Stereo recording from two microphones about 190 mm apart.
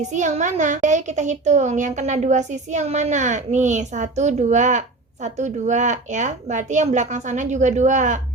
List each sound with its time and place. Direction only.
0.0 s a woman's voice: 40° right (ahead or behind)